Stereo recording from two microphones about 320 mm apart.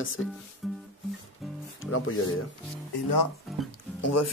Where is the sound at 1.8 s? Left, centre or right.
Left.